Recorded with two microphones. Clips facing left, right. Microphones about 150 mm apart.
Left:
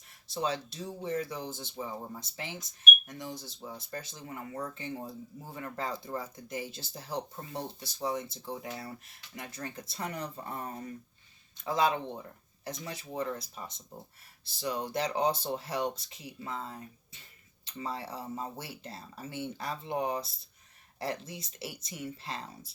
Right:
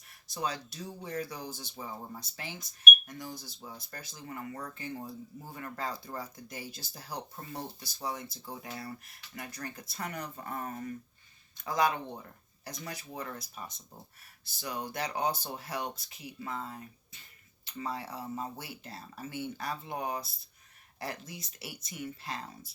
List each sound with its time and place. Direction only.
0.3 s speech: 25° left (ahead or behind)